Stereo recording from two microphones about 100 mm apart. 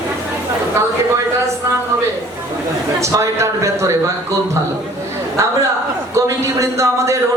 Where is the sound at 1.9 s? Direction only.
30° right (ahead or behind).